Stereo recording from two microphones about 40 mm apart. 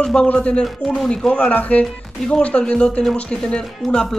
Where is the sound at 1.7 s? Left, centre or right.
Left.